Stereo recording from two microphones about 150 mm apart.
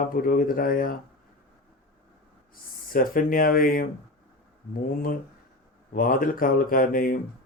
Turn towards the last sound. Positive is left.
turn(degrees=70)  # may be behind; listen again after turning